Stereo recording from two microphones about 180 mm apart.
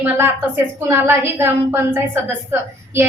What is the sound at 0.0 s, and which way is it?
A woman's voice, 15° right (ahead or behind).